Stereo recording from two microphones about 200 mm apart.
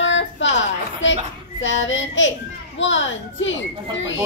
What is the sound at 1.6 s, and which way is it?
A child's voice, 70° left (ahead or behind).